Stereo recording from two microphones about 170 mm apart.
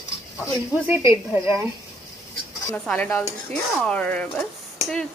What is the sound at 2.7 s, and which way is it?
Dishes, 10° left (ahead or behind).